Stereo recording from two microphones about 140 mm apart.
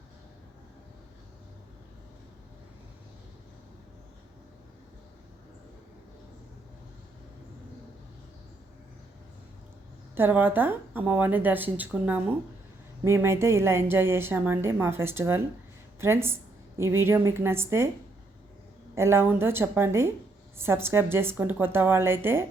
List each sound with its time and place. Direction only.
10.2 s a woman's voice: 15° right (ahead or behind)
18.9 s a woman's voice: 20° right (ahead or behind)